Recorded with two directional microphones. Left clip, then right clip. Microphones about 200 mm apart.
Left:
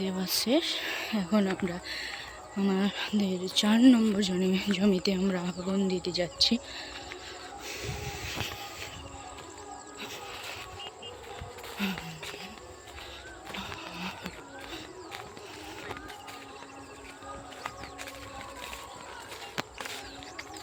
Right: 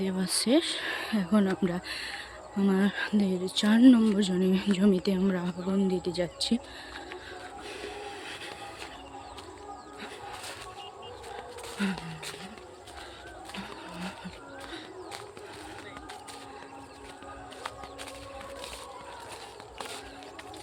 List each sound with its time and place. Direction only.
0.0 s speech: 20° right (ahead or behind)
7.7 s a sound: 20° right (ahead or behind)
11.8 s speech: 25° right (ahead or behind)